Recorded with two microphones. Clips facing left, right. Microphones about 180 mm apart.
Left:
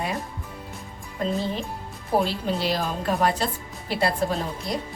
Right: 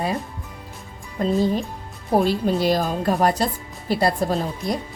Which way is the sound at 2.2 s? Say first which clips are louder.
Right 6 dB; 45° right (ahead or behind).